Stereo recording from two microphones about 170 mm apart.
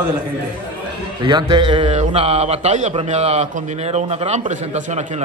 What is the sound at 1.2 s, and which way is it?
A man's voice, 30° right (ahead or behind).